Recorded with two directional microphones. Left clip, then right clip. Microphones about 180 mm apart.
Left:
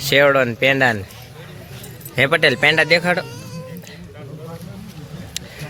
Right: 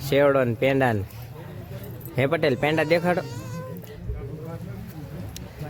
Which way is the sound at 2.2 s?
5° right (ahead or behind).